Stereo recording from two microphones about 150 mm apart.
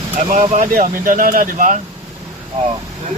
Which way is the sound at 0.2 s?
60° right (ahead or behind).